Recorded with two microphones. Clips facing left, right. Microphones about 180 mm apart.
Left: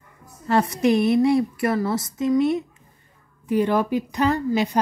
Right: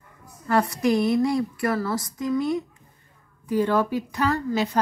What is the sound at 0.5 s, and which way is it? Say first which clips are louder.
A woman's voice: left 2 dB; 20° left (ahead or behind).